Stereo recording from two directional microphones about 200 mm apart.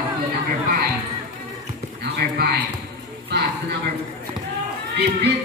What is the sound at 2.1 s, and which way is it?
Clip-clop, 50° right (ahead or behind).